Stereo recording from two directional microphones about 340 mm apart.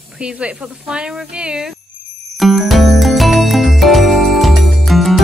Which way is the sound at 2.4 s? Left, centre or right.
Centre.